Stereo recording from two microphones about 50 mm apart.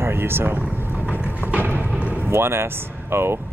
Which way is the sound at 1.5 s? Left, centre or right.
Right.